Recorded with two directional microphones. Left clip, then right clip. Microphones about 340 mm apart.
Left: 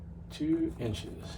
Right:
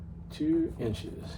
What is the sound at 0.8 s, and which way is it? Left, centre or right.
Speech, centre.